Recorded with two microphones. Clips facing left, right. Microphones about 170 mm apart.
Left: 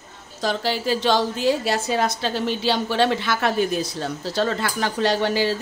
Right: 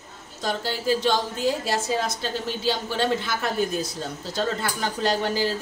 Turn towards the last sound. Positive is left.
turn(degrees=75)  # may be behind; listen again after turning